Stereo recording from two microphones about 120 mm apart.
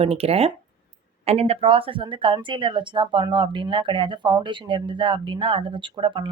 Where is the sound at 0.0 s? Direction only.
55° right (ahead or behind).